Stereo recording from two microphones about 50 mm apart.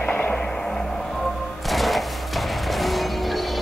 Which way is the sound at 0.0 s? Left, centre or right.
Left.